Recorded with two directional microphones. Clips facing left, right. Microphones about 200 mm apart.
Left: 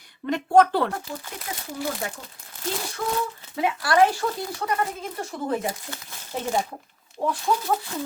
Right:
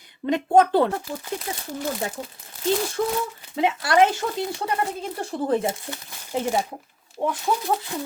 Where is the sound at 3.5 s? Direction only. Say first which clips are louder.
Right 2 dB; 25° right (ahead or behind).